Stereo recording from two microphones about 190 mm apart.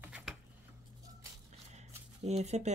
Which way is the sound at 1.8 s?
35° right (ahead or behind).